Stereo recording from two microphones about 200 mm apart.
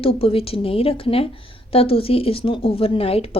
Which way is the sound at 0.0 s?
30° left (ahead or behind).